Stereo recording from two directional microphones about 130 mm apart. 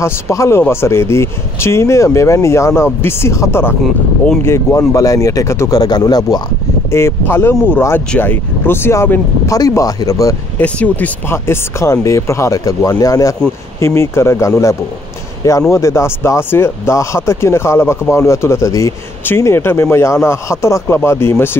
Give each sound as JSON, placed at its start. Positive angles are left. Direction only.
{"t": 0.0, "sound": "speech", "side_deg": 20}
{"t": 6.9, "sound": "speech", "side_deg": 20}
{"t": 10.6, "sound": "speech", "side_deg": 10}